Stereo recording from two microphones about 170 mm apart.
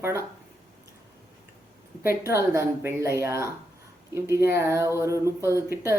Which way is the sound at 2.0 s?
15° right (ahead or behind).